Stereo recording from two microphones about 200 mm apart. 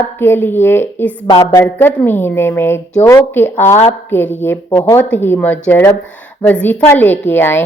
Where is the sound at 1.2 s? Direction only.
20° left (ahead or behind).